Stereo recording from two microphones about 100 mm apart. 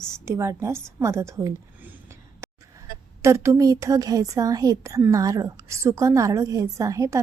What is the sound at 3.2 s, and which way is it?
A woman's voice, 30° right (ahead or behind).